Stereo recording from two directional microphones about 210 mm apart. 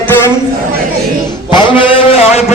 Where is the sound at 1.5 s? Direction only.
20° left (ahead or behind).